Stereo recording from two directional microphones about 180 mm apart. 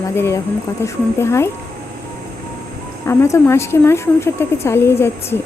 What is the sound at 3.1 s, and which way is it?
Speech, 15° left (ahead or behind).